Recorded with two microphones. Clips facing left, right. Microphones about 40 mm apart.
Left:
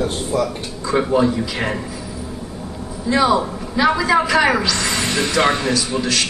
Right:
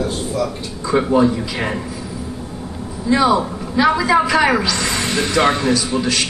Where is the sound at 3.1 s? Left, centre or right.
Centre.